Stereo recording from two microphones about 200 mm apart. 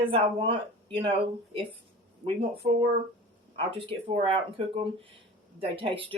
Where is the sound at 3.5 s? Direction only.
25° right (ahead or behind).